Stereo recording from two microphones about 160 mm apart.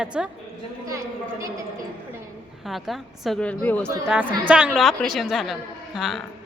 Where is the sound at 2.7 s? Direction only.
Centre (ahead or behind).